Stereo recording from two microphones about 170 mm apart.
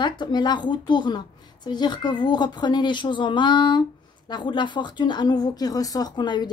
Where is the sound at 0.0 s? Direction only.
25° left (ahead or behind).